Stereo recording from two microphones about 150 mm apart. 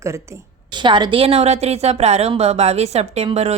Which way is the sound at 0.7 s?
30° right (ahead or behind).